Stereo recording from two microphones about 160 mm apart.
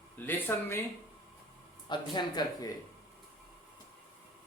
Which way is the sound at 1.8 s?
30° left (ahead or behind).